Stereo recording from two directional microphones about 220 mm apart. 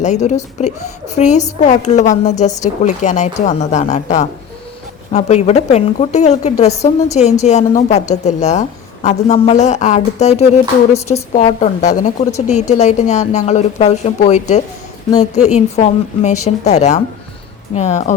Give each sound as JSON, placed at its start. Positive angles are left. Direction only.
{"t": 0.0, "sound": "a woman's voice", "side_deg": 30}